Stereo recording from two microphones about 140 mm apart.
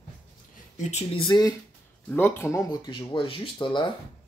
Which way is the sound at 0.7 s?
55° left (ahead or behind).